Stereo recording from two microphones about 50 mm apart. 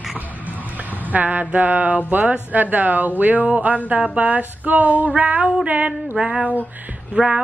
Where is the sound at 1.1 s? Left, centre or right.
Right.